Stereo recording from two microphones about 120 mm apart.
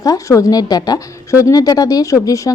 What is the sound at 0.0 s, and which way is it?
A woman's voice, 30° left (ahead or behind).